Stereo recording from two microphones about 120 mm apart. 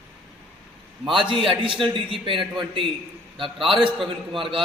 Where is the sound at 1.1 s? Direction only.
45° right (ahead or behind).